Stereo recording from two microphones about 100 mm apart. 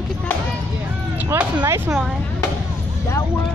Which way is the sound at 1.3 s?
25° right (ahead or behind).